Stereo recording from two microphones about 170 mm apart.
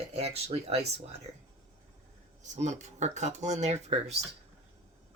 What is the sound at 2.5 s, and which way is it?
Speech, 45° right (ahead or behind).